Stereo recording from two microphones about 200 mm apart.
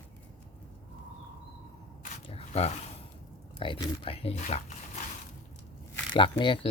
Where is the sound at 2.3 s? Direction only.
30° left (ahead or behind).